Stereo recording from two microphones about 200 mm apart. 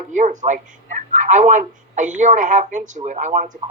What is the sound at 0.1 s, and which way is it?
Speech, 40° right (ahead or behind).